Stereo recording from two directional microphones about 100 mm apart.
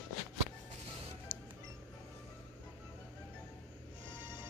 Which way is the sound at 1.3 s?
45° right (ahead or behind).